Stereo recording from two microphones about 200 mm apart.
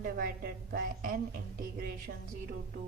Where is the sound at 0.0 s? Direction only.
45° right (ahead or behind).